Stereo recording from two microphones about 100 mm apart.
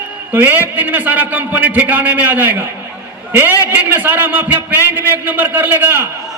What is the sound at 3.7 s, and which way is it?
A man's voice, 20° right (ahead or behind).